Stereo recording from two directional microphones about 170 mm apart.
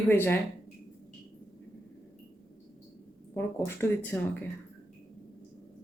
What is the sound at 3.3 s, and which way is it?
Speech, 10° left (ahead or behind).